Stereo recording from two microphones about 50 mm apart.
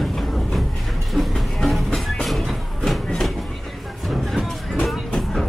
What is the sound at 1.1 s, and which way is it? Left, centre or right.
Music, centre.